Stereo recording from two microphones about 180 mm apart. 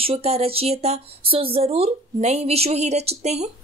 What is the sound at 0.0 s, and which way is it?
Speech, 35° right (ahead or behind).